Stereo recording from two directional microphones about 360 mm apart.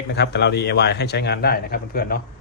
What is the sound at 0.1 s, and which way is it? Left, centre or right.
Speech, left.